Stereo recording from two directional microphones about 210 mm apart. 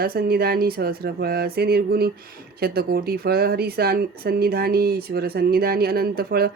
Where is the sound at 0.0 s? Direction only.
45° right (ahead or behind).